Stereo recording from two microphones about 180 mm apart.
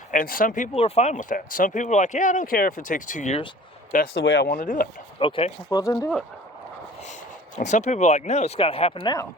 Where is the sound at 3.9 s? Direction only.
60° left (ahead or behind).